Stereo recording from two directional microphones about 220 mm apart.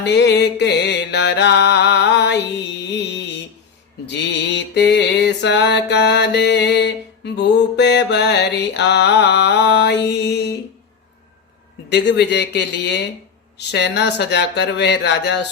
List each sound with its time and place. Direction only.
0.0 s music: 50° left (ahead or behind)
4.0 s mantra: 50° left (ahead or behind)
11.9 s speech: 50° left (ahead or behind)